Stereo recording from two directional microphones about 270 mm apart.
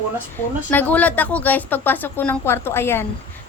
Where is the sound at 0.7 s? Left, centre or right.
Centre.